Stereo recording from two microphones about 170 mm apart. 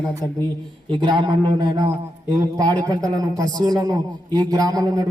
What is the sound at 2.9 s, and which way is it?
Speech, 20° right (ahead or behind).